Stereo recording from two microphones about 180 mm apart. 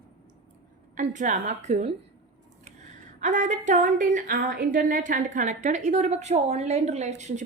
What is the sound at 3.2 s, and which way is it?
A woman's voice, 45° right (ahead or behind).